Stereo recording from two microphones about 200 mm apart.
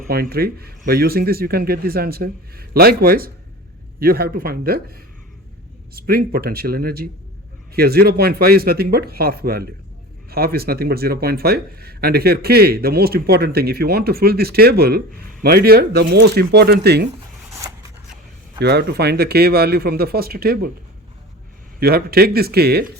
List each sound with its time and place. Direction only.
0.1 s speech: 50° right (ahead or behind)
18.6 s speech: 55° right (ahead or behind)
21.8 s speech: 50° right (ahead or behind)